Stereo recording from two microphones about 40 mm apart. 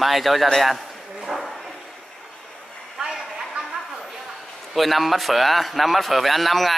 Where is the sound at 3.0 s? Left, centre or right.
Centre.